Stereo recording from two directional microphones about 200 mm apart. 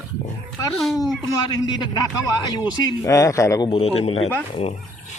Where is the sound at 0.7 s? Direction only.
Centre (ahead or behind).